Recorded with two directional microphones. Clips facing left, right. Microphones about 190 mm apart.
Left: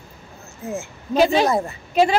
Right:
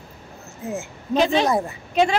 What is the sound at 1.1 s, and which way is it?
Speech, 5° left (ahead or behind).